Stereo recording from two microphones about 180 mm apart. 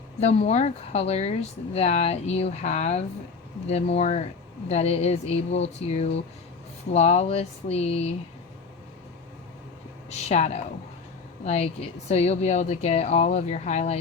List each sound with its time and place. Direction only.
0.2 s speech: 35° left (ahead or behind)
10.1 s speech: 40° left (ahead or behind)